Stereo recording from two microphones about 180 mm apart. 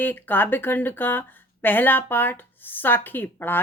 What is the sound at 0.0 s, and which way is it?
Speech, 10° left (ahead or behind).